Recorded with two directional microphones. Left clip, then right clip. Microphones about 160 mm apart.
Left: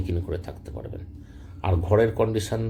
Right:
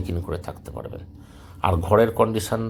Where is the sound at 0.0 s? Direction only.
5° right (ahead or behind).